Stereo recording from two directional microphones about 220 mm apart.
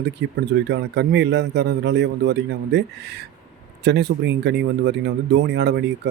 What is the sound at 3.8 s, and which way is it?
A man's voice, 50° right (ahead or behind).